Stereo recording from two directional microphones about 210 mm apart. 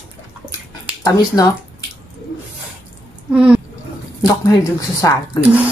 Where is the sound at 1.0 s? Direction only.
15° left (ahead or behind).